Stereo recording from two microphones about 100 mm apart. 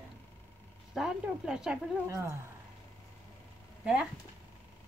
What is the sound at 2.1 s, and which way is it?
Speech, 30° right (ahead or behind).